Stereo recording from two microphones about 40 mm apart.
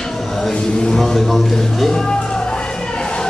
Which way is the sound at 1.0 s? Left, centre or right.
Centre.